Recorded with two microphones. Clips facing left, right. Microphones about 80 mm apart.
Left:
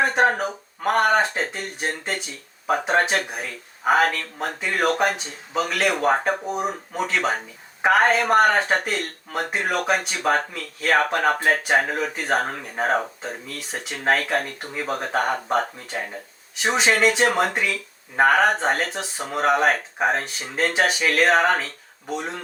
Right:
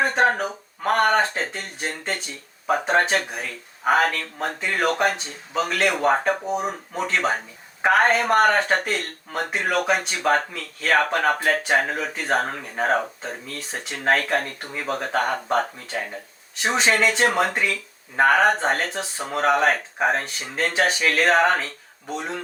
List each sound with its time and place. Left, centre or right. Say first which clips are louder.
0.0 s speech: left 1 dB; centre